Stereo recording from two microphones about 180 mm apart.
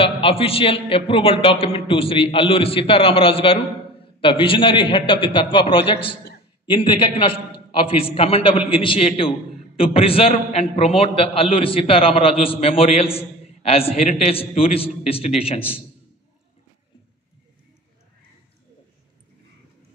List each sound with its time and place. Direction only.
0.0 s a man's voice: 30° left (ahead or behind)